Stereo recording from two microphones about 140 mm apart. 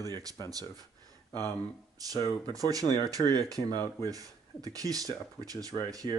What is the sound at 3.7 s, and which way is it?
Speech, 15° left (ahead or behind).